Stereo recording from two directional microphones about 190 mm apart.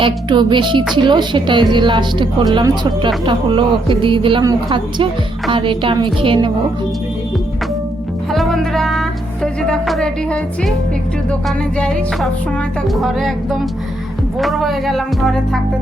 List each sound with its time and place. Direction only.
0.0 s a woman's voice: 25° right (ahead or behind)
8.3 s music: centre (ahead or behind)
11.3 s speech: 5° left (ahead or behind)